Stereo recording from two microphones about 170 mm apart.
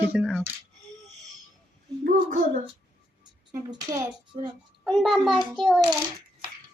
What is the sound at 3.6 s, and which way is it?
Speech, 20° right (ahead or behind).